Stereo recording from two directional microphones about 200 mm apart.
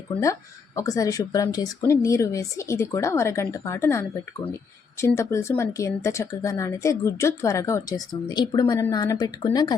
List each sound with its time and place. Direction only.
0.8 s speech: 15° left (ahead or behind)